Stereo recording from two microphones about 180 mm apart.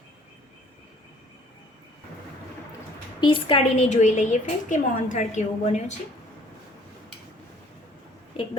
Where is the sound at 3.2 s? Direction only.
30° left (ahead or behind).